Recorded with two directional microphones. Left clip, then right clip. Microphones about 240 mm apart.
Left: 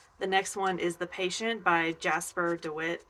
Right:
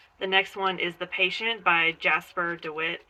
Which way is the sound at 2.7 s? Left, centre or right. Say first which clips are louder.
Right 3 dB; left.